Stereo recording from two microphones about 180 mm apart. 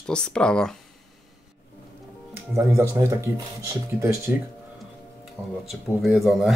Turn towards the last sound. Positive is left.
turn(degrees=0)  # may be behind; listen again after turning